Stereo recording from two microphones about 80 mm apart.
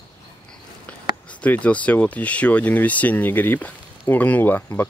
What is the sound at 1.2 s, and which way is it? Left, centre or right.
Speech, centre.